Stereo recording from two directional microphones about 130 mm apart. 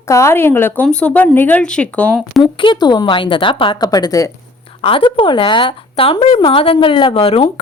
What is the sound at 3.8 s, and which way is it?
Speech, 30° left (ahead or behind).